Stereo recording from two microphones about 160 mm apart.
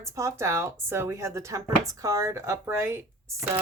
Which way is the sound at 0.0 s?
20° right (ahead or behind).